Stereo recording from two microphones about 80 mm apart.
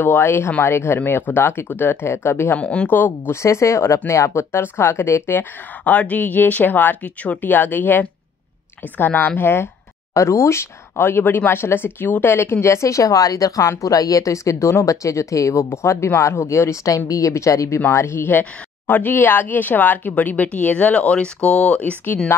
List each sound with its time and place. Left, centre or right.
0.0 s speech: left
2.5 s a woman's voice: centre
3.4 s speech: left
10.1 s speech: left; by 22.2 s centre